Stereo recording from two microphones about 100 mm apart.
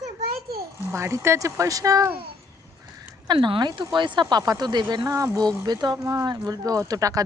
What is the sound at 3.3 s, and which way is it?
A woman's voice, 50° right (ahead or behind).